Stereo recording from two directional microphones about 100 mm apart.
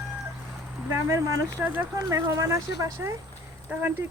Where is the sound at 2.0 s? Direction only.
30° right (ahead or behind).